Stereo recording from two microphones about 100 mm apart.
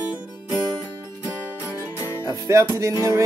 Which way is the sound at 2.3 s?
35° right (ahead or behind).